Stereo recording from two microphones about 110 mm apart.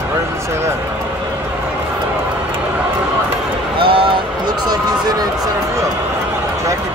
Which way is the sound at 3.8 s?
55° right (ahead or behind).